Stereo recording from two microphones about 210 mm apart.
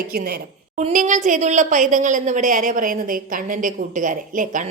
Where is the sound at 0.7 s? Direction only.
35° right (ahead or behind).